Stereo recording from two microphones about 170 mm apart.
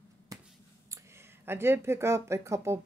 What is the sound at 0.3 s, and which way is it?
Finger snapping, 20° right (ahead or behind).